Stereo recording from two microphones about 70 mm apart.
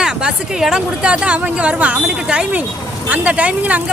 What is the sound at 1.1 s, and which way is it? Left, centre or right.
Speech, centre.